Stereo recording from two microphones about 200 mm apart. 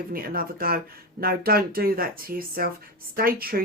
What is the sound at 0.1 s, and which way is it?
Speech, 45° right (ahead or behind).